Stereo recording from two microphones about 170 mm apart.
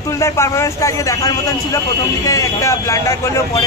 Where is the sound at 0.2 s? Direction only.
15° left (ahead or behind).